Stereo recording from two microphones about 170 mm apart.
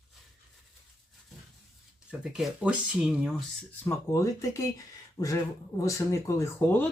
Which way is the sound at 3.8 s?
15° left (ahead or behind).